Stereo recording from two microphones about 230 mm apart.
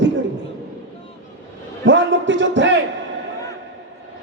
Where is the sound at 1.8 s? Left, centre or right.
Right.